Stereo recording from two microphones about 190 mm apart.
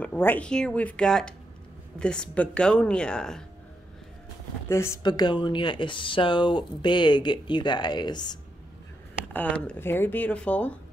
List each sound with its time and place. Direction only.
0.0 s speech: 10° left (ahead or behind)
4.6 s speech: 15° left (ahead or behind)
9.3 s speech: 10° left (ahead or behind)